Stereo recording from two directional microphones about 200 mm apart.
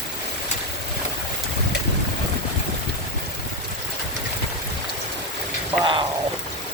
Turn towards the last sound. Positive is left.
turn(degrees=-25)  # may be behind; listen again after turning